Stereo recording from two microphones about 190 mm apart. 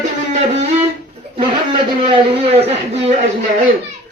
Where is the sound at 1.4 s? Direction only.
25° right (ahead or behind).